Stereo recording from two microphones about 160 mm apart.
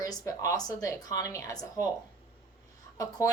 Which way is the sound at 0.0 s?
20° left (ahead or behind).